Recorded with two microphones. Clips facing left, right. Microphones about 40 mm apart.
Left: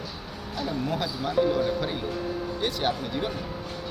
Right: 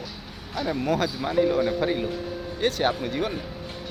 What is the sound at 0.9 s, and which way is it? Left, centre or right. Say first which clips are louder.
Speech: right 8 dB; right.